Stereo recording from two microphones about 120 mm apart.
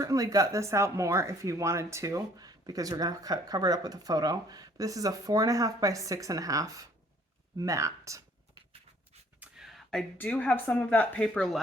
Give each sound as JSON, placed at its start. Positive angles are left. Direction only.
{"t": 0.0, "sound": "speech", "side_deg": -30}
{"t": 9.4, "sound": "a sound", "side_deg": -5}
{"t": 10.2, "sound": "speech", "side_deg": 10}